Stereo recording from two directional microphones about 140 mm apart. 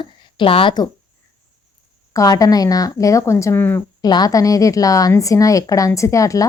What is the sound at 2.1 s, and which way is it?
A woman's voice, 25° left (ahead or behind).